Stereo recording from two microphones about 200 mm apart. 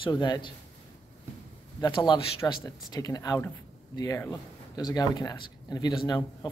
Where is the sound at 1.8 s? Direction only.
20° left (ahead or behind).